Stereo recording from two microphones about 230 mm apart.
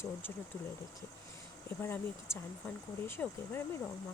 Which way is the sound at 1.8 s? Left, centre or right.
Centre.